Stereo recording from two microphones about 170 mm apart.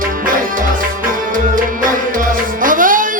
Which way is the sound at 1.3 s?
50° right (ahead or behind).